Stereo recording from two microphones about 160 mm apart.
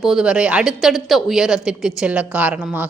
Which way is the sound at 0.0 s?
5° right (ahead or behind).